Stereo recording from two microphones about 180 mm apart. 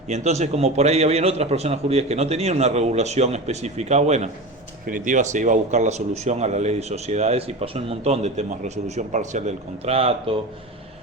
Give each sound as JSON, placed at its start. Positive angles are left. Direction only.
{"t": 0.1, "sound": "a man's voice", "side_deg": -40}